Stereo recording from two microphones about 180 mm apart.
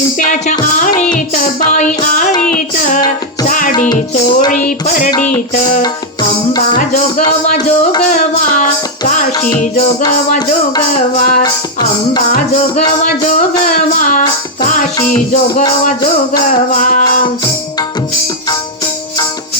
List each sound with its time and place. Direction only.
0.3 s music: 45° left (ahead or behind)
6.7 s speech: 45° left (ahead or behind)
8.1 s music: 45° left (ahead or behind)
11.2 s music: 45° left (ahead or behind)